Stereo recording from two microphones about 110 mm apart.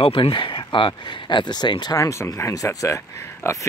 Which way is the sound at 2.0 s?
25° left (ahead or behind).